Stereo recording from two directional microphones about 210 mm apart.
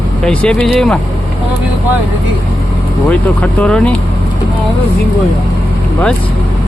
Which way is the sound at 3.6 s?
5° left (ahead or behind).